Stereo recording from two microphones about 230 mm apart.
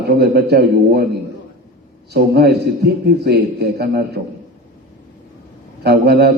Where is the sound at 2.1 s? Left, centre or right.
Right.